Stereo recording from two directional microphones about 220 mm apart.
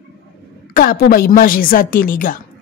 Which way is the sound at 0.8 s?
40° left (ahead or behind).